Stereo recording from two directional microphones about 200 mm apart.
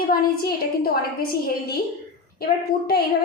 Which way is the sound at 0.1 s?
50° left (ahead or behind).